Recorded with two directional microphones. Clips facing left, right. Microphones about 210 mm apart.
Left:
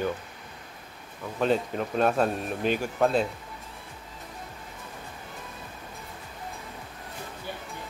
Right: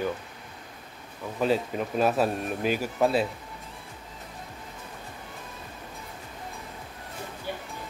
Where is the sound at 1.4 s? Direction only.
5° right (ahead or behind).